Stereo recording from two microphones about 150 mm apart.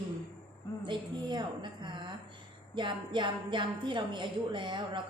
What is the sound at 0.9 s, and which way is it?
A woman's voice, 30° right (ahead or behind).